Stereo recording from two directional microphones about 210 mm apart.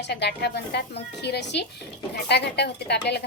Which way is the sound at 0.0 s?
55° left (ahead or behind).